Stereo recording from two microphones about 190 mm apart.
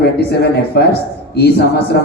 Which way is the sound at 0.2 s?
55° left (ahead or behind).